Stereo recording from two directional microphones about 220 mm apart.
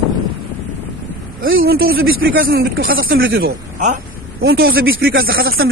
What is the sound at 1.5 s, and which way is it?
Speech, 65° right (ahead or behind).